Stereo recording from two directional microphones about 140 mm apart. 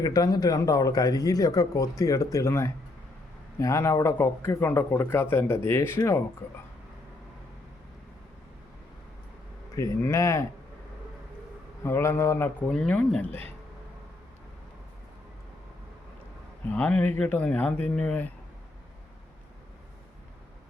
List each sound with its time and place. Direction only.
0.0 s speech: 25° left (ahead or behind)
9.7 s speech: 20° left (ahead or behind)
11.8 s speech: 15° left (ahead or behind)
12.7 s speech: 5° left (ahead or behind)
16.6 s speech: 10° left (ahead or behind)